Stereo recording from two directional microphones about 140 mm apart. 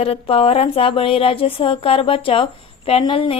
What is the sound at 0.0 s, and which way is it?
A woman's voice, 45° left (ahead or behind).